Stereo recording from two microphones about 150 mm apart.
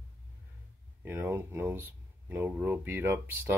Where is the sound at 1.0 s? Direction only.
15° right (ahead or behind).